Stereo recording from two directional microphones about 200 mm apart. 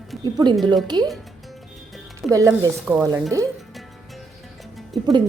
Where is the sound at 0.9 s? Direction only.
20° right (ahead or behind).